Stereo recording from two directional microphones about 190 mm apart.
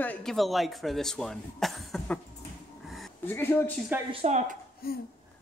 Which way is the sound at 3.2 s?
10° left (ahead or behind).